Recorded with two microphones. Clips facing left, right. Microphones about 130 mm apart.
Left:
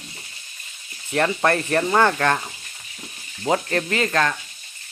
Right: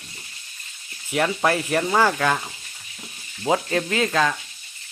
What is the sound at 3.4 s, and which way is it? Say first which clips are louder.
Speech: even; 5° right (ahead or behind).